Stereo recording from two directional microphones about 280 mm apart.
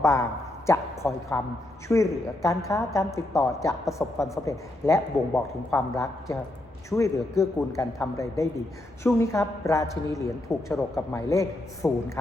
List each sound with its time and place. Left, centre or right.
0.0 s a woman's voice: centre